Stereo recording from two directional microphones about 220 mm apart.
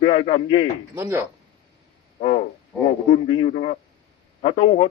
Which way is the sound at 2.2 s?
30° left (ahead or behind).